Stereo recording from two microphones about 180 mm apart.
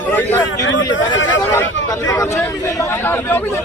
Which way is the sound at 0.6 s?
90° left.